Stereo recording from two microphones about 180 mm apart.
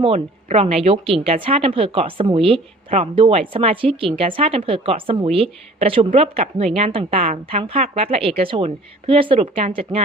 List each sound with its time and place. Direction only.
0.0 s speech: 35° right (ahead or behind)